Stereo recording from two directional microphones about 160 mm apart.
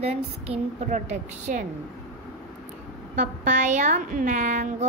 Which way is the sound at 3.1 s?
50° right (ahead or behind).